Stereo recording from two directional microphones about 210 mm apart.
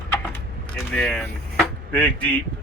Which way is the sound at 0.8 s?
5° left (ahead or behind).